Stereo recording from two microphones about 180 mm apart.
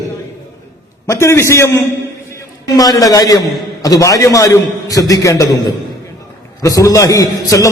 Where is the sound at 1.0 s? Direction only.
15° left (ahead or behind).